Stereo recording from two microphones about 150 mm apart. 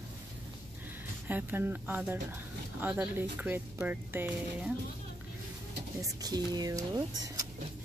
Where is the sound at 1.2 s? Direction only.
15° right (ahead or behind).